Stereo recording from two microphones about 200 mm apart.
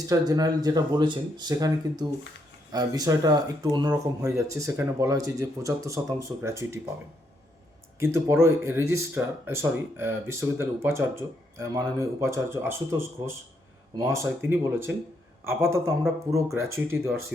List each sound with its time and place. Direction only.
0.1 s speech: 20° right (ahead or behind)
7.9 s speech: 10° right (ahead or behind)